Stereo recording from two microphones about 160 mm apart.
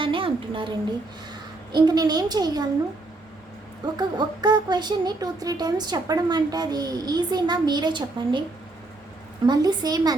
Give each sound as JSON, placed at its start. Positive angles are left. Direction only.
{"t": 0.0, "sound": "a sound", "side_deg": -30}
{"t": 1.3, "sound": "a woman's voice", "side_deg": -25}
{"t": 3.9, "sound": "speech", "side_deg": -25}
{"t": 9.5, "sound": "speech", "side_deg": -25}